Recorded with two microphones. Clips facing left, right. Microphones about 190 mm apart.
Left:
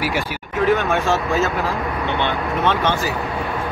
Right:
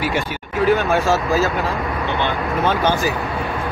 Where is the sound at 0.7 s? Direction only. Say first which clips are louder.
Right 2 dB; 35° right (ahead or behind).